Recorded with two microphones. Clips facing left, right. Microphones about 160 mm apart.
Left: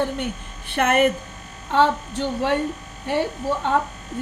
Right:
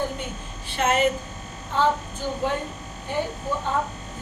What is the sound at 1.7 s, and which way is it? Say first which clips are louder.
A woman's voice: left 4 dB; 75° left (ahead or behind).